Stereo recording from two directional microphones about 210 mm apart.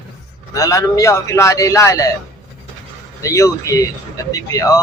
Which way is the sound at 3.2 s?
15° left (ahead or behind).